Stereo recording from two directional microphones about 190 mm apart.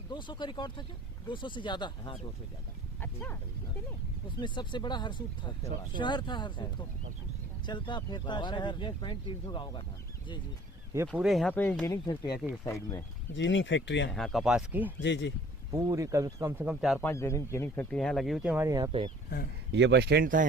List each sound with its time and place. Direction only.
0.1 s speech: 25° left (ahead or behind)
3.0 s livestock: 10° left (ahead or behind)
4.4 s speech: 25° left (ahead or behind)
11.1 s speech: centre (ahead or behind)
11.9 s speech: 20° left (ahead or behind)
13.3 s speech: 75° left (ahead or behind)
14.1 s speech: centre (ahead or behind)
15.0 s speech: 70° left (ahead or behind)
15.7 s speech: 15° right (ahead or behind)
17.0 s speech: 15° left (ahead or behind); by 18.9 s 15° right (ahead or behind)
18.9 s speech: 30° right (ahead or behind)
19.7 s speech: 70° right (ahead or behind); by 20.4 s 50° right (ahead or behind)